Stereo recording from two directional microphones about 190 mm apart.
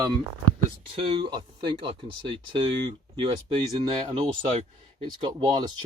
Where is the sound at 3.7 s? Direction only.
30° right (ahead or behind).